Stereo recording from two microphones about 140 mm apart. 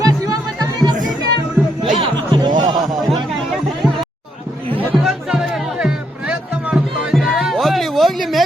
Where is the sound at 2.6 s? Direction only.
30° right (ahead or behind).